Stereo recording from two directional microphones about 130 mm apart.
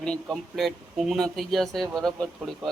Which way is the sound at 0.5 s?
Centre (ahead or behind).